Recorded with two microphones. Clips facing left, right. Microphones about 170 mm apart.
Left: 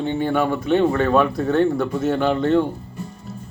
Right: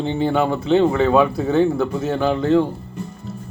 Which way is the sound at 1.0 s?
10° right (ahead or behind).